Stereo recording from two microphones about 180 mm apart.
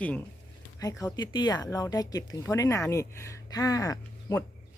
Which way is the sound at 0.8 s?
20° left (ahead or behind).